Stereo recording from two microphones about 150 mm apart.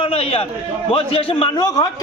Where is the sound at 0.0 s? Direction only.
40° left (ahead or behind).